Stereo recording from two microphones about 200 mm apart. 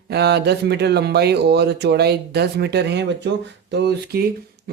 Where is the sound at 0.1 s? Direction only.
55° right (ahead or behind).